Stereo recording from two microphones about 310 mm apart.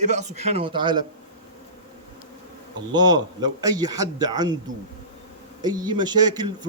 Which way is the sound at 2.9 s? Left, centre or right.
Centre.